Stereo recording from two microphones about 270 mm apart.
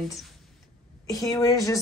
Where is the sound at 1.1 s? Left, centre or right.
Centre.